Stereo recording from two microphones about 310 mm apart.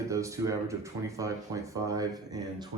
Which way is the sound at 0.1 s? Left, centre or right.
Centre.